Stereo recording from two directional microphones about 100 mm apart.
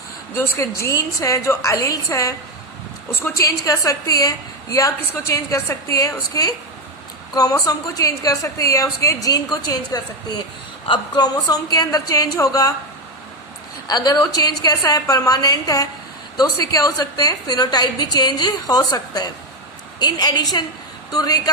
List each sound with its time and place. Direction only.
0.3 s a woman's voice: 30° left (ahead or behind)
13.8 s a woman's voice: 40° left (ahead or behind)